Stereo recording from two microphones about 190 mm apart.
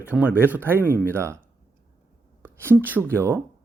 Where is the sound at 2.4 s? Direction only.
10° right (ahead or behind).